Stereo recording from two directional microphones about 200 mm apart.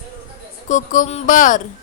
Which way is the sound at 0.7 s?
40° left (ahead or behind).